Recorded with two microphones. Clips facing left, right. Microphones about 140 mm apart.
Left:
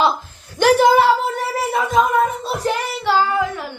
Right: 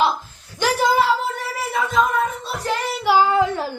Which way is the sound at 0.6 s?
65° left (ahead or behind).